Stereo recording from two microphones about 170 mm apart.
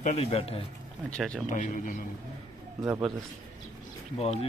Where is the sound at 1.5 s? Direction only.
50° left (ahead or behind).